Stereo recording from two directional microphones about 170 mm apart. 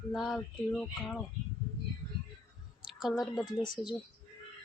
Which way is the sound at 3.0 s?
Centre (ahead or behind).